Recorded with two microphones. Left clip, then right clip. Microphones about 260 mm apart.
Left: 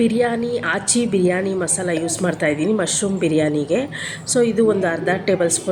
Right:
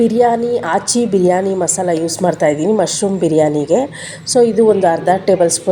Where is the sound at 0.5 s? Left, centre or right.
Right.